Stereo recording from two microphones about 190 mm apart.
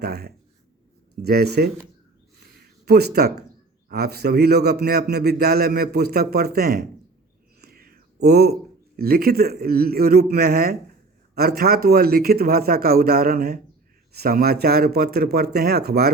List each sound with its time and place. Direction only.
0.0 s a man's voice: 55° right (ahead or behind)
2.8 s a man's voice: 60° right (ahead or behind)
7.6 s whispering: 55° right (ahead or behind)
9.0 s a man's voice: 50° right (ahead or behind)